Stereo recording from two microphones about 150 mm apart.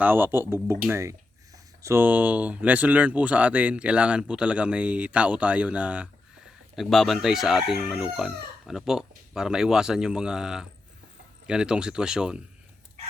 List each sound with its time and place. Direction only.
0.0 s speech: 15° right (ahead or behind)